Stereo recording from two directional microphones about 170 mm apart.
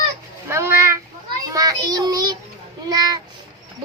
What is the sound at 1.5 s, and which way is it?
Child singing, 20° right (ahead or behind).